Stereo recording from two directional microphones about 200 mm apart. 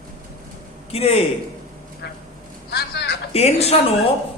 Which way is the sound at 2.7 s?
55° left (ahead or behind).